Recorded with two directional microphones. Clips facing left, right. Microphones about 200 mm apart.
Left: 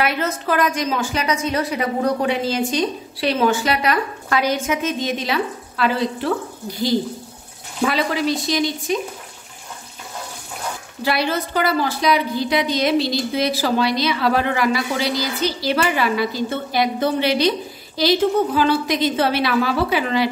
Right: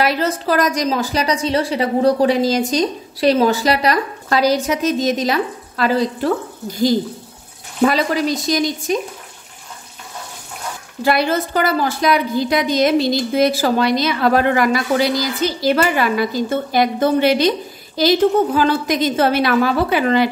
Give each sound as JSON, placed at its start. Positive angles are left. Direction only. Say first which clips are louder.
{"t": 0.0, "sound": "a woman's voice", "louder": "right 3 dB", "side_deg": -35}
{"t": 7.8, "sound": "a woman's voice", "louder": "right 4 dB", "side_deg": -40}
{"t": 11.1, "sound": "a woman's voice", "louder": "right 4 dB", "side_deg": -45}